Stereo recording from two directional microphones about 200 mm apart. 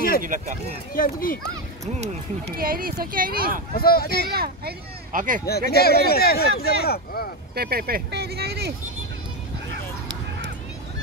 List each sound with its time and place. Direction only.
0.2 s speech: 40° right (ahead or behind)
0.9 s speech: 45° left (ahead or behind)
2.4 s speech: 45° right (ahead or behind)
3.7 s speech: 50° left (ahead or behind)
4.2 s speech: 50° right (ahead or behind)
5.5 s speech: 50° left (ahead or behind)
7.5 s speech: 50° right (ahead or behind)